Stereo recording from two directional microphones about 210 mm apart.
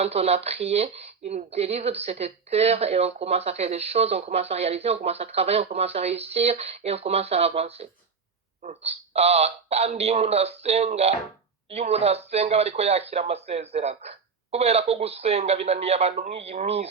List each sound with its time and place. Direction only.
0.0 s a woman's voice: 30° right (ahead or behind)